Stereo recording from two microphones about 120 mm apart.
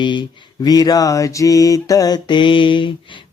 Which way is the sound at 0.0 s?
40° left (ahead or behind).